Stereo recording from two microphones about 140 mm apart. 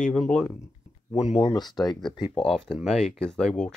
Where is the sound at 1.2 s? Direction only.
50° left (ahead or behind).